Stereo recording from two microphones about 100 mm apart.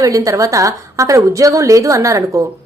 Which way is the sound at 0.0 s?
35° right (ahead or behind).